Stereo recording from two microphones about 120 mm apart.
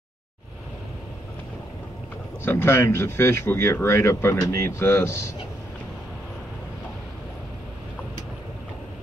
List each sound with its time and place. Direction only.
2.4 s speech: 20° left (ahead or behind)